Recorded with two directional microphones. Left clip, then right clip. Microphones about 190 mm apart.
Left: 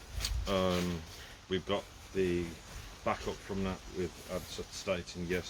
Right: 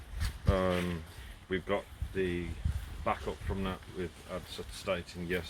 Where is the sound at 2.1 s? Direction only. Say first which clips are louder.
Left 2 dB; 5° right (ahead or behind).